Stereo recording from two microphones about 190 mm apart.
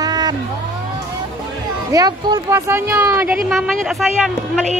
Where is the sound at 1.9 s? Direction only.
20° right (ahead or behind).